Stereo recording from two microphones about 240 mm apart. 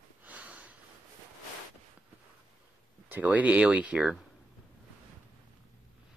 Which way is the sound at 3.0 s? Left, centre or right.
Centre.